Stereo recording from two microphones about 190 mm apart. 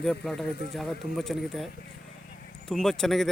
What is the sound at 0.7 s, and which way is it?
Speech, centre (ahead or behind).